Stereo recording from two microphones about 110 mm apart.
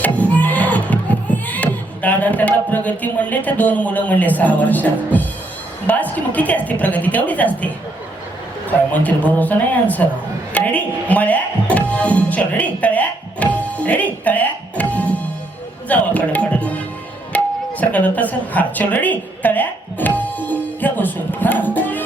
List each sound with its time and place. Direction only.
0.3 s a sound: 15° left (ahead or behind)
5.9 s a woman's voice: 15° left (ahead or behind)
8.9 s a woman's voice: 15° left (ahead or behind)